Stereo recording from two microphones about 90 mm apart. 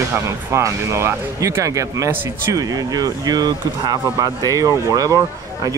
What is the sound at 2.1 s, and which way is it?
Speech, 25° right (ahead or behind).